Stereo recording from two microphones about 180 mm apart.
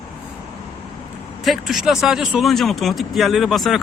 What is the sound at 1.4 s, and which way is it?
A man's voice, centre (ahead or behind).